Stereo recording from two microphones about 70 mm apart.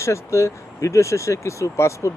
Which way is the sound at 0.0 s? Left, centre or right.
Left.